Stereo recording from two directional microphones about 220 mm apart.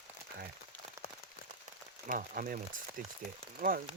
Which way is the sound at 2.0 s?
40° right (ahead or behind).